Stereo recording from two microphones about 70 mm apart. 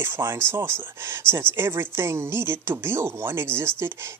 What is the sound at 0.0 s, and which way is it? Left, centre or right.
Speech, right.